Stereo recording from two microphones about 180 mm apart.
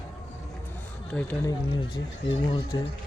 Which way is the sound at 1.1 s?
5° left (ahead or behind).